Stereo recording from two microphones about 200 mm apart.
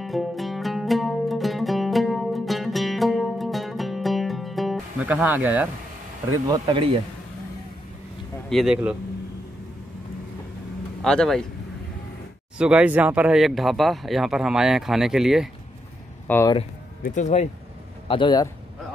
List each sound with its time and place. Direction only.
0.0 s music: centre (ahead or behind)
6.4 s speech: 20° right (ahead or behind)
8.5 s speech: centre (ahead or behind)
11.1 s speech: 5° left (ahead or behind)
12.5 s speech: 5° right (ahead or behind)
16.3 s speech: 10° left (ahead or behind)
16.5 s speech: 40° left (ahead or behind)
18.0 s speech: 25° left (ahead or behind)